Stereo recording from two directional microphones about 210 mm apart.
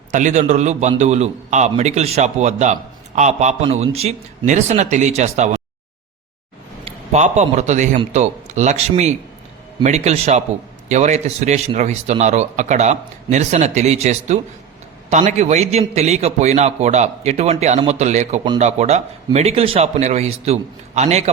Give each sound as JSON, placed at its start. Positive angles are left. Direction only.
{"t": 0.1, "sound": "a man's voice", "side_deg": -35}
{"t": 6.8, "sound": "a man's voice", "side_deg": -35}